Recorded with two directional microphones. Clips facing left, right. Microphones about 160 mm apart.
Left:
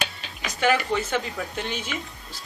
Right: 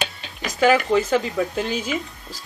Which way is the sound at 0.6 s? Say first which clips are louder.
Right 6 dB; 40° right (ahead or behind).